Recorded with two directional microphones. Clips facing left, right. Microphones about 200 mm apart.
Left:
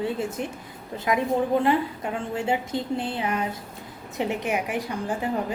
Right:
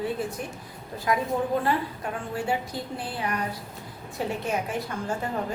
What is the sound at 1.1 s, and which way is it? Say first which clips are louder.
A woman's voice: left 3 dB; 20° left (ahead or behind).